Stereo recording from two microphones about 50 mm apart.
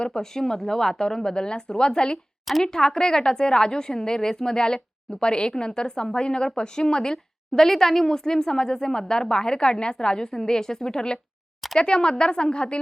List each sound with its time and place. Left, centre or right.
0.0 s a woman's voice: centre